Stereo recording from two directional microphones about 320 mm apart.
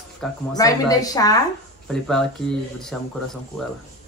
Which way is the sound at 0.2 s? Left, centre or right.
Centre.